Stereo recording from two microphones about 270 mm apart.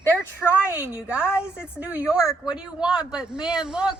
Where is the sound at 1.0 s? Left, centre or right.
Centre.